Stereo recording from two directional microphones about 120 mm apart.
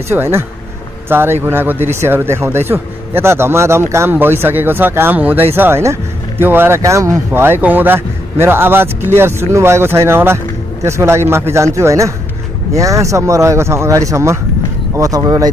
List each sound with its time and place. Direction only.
0.1 s a man's voice: 20° right (ahead or behind)